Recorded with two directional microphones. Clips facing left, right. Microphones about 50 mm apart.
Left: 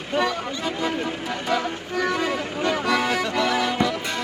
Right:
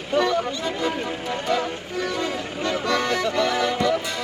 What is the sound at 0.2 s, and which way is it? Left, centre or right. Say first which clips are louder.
Music: right 2 dB; centre.